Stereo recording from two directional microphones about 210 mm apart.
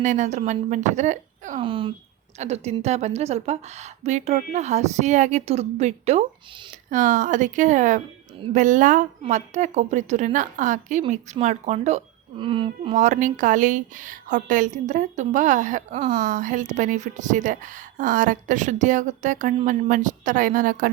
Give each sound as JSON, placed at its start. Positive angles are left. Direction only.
{"t": 0.0, "sound": "speech", "side_deg": -35}
{"t": 1.6, "sound": "speech", "side_deg": -25}